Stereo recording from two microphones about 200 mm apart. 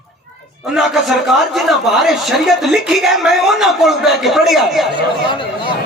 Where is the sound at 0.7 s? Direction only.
Centre (ahead or behind).